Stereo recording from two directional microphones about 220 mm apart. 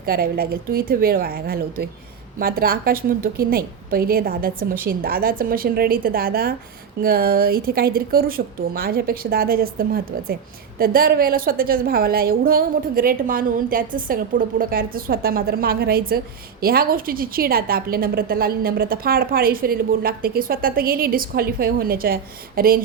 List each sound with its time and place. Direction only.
0.0 s a woman's voice: 45° right (ahead or behind)